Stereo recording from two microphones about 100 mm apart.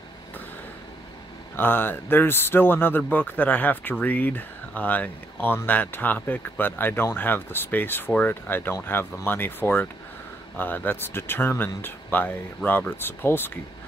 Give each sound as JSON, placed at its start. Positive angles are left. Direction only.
{"t": 1.6, "sound": "speech", "side_deg": 20}